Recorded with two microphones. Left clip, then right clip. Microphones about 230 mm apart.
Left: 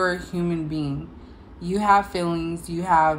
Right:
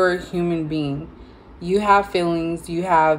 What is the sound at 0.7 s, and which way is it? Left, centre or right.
Speech, left.